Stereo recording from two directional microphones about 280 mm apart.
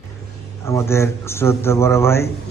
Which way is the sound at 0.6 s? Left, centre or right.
Centre.